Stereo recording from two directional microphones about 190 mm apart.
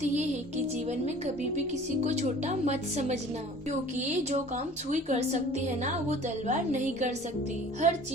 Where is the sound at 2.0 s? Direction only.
40° right (ahead or behind).